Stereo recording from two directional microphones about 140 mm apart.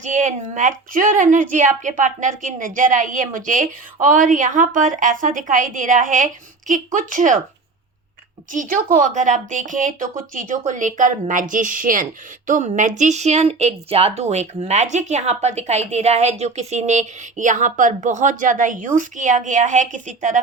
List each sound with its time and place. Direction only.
0.0 s a woman's voice: 60° right (ahead or behind)
8.5 s a woman's voice: 80° right